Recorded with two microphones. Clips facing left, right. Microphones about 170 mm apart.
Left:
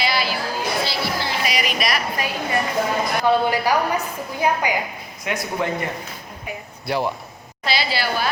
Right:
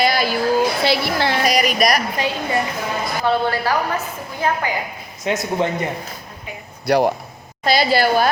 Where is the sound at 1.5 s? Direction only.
40° right (ahead or behind).